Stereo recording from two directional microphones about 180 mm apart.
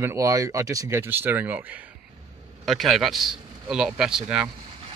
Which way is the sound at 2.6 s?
Centre (ahead or behind).